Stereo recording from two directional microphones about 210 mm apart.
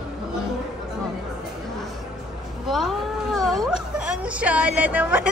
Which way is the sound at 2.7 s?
Centre (ahead or behind).